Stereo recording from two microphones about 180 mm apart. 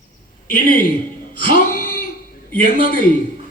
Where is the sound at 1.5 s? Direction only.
55° left (ahead or behind).